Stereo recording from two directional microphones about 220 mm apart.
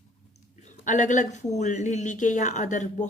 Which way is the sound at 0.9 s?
35° left (ahead or behind).